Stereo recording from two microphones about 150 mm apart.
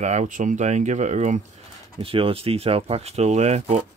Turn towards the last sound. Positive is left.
turn(degrees=-50)  # may be behind; listen again after turning